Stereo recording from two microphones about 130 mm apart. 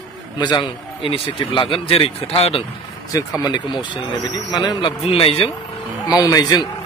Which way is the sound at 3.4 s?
35° left (ahead or behind).